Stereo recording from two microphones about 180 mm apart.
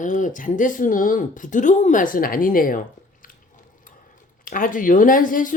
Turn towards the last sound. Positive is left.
turn(degrees=50)  # may be behind; listen again after turning